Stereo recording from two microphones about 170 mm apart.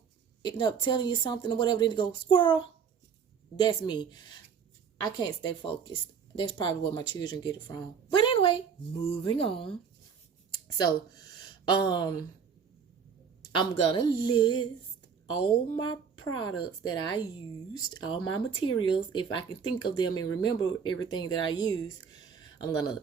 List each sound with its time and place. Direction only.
0.4 s a woman's voice: 25° left (ahead or behind)
10.5 s a sound: 25° left (ahead or behind)
11.7 s speech: 25° left (ahead or behind)
13.5 s speech: 25° left (ahead or behind)